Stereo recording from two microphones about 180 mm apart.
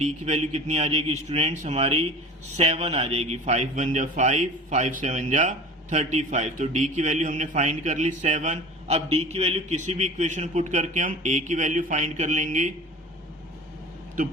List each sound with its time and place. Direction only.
0.0 s a man's voice: 40° right (ahead or behind)